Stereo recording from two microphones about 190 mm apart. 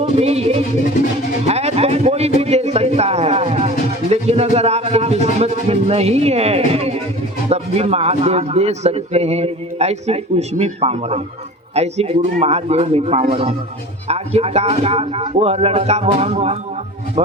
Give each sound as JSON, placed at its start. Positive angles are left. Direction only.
{"t": 0.0, "sound": "music", "side_deg": -35}
{"t": 1.5, "sound": "a man's voice", "side_deg": -35}